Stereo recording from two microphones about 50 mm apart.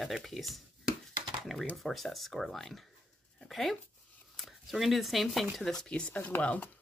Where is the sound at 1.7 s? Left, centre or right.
Centre.